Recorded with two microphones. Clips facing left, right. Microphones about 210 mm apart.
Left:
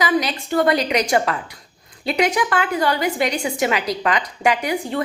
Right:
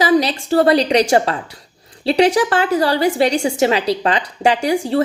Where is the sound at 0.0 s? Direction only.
30° right (ahead or behind).